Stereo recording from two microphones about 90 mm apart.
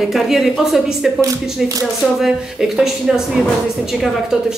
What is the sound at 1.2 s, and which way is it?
Speech, 40° right (ahead or behind).